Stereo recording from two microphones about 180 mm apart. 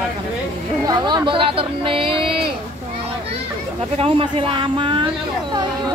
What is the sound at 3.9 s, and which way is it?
Speech, 30° right (ahead or behind).